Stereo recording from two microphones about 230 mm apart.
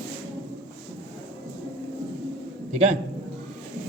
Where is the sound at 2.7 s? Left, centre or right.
Right.